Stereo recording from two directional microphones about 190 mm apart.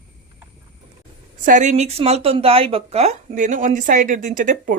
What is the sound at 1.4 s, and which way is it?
Speech, 40° right (ahead or behind).